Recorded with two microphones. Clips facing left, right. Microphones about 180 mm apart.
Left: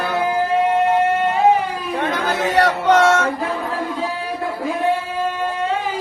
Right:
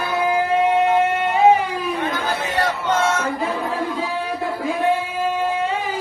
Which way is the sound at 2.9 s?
70° left (ahead or behind).